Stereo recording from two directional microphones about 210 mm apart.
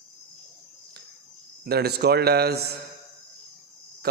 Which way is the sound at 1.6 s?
50° right (ahead or behind).